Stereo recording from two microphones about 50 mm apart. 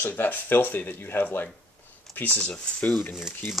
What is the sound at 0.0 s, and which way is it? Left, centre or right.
Speech, left.